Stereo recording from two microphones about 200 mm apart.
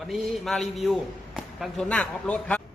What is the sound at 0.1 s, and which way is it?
A man's voice, centre (ahead or behind).